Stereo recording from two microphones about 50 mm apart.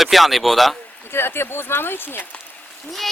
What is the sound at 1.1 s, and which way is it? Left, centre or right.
Speech, left.